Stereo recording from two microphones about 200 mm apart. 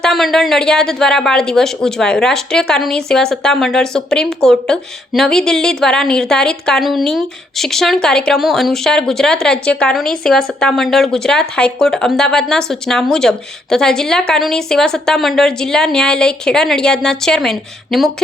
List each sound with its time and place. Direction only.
0.0 s speech: centre (ahead or behind)